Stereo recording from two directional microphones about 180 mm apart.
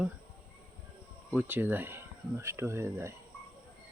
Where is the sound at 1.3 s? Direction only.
10° right (ahead or behind).